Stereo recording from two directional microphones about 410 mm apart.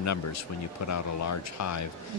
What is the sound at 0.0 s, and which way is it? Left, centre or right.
Speech, left.